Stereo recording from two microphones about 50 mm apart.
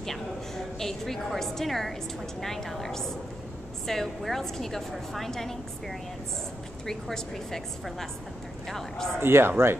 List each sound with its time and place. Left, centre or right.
0.0 s a woman's voice: centre
9.2 s speech: right